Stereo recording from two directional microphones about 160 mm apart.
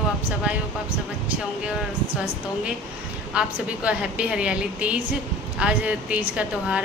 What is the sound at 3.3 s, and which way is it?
A woman's voice, 5° right (ahead or behind).